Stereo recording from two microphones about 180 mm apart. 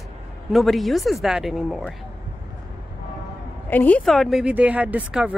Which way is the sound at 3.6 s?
10° left (ahead or behind).